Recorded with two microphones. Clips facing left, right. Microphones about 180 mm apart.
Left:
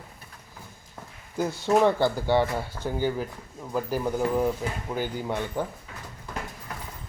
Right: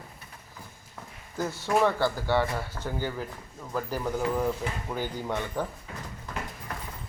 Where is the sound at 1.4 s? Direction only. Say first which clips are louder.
Left 3 dB; 15° left (ahead or behind).